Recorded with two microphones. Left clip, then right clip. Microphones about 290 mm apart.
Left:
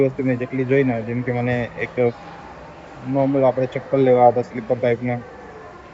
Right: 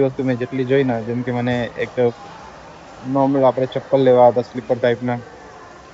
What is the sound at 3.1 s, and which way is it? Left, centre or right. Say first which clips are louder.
Speech: right 2 dB; centre.